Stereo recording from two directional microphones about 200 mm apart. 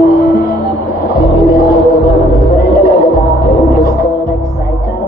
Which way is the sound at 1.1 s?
45° left (ahead or behind).